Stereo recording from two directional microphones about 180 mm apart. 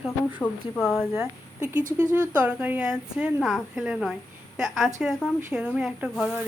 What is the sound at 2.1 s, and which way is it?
Speech, 10° right (ahead or behind).